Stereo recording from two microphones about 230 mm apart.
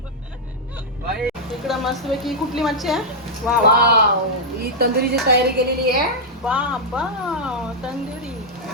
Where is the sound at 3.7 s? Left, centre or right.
Right.